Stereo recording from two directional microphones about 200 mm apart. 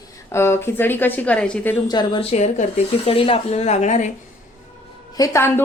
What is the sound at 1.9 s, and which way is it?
A woman's voice, 25° left (ahead or behind).